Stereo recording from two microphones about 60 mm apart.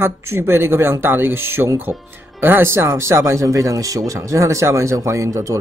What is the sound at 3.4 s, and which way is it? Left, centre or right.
Speech, right.